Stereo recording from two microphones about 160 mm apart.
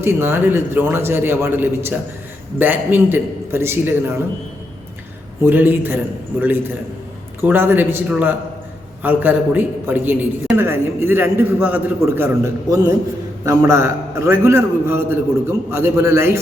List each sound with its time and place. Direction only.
0.0 s a man's voice: 15° right (ahead or behind)
5.5 s a man's voice: 10° right (ahead or behind)
7.4 s a man's voice: 10° right (ahead or behind)